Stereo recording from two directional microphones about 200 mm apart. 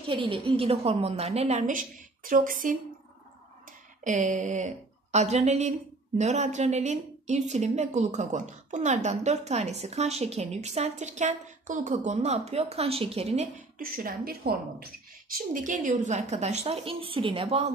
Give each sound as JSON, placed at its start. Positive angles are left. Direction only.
{"t": 0.0, "sound": "a woman's voice", "side_deg": -25}
{"t": 4.0, "sound": "a woman's voice", "side_deg": -40}
{"t": 13.7, "sound": "a woman's voice", "side_deg": -45}